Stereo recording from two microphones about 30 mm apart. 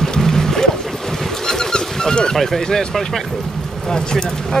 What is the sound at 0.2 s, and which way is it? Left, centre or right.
Music, centre.